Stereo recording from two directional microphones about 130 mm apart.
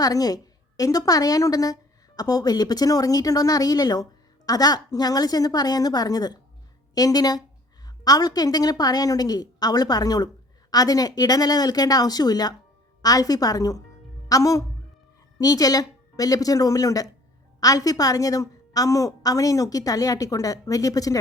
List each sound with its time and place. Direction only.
0.0 s a woman's voice: 30° left (ahead or behind)